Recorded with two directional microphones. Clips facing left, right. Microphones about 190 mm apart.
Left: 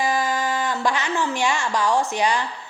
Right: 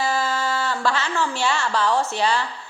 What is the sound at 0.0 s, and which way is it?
A woman's voice, 15° left (ahead or behind).